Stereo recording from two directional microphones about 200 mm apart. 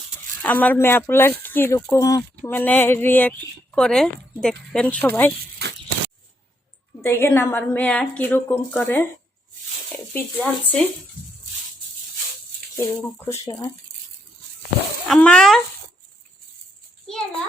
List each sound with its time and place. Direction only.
0.4 s speech: 10° left (ahead or behind)
7.0 s speech: 10° left (ahead or behind)
10.1 s speech: 10° left (ahead or behind)
12.7 s speech: 15° left (ahead or behind)
15.0 s speech: 5° left (ahead or behind)